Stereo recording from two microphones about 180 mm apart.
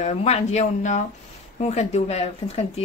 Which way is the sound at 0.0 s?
40° left (ahead or behind).